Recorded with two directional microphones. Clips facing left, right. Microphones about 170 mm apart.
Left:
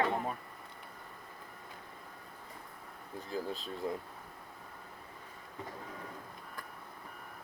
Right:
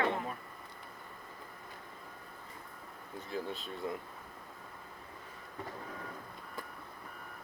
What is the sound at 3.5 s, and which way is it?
Speech, 40° left (ahead or behind).